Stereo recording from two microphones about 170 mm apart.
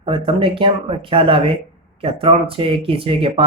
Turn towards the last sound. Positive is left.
turn(degrees=-30)  # may be behind; listen again after turning